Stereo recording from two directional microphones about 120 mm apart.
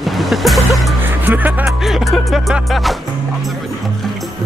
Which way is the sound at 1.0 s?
15° right (ahead or behind).